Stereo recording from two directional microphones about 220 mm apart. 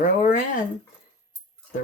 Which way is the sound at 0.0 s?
35° left (ahead or behind).